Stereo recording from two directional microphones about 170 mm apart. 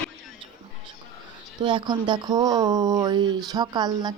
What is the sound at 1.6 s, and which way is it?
Speech, 30° right (ahead or behind).